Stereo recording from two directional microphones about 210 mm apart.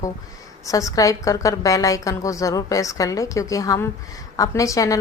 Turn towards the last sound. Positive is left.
turn(degrees=15)  # may be behind; listen again after turning